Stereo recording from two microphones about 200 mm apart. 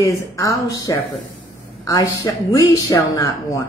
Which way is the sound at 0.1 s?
15° left (ahead or behind).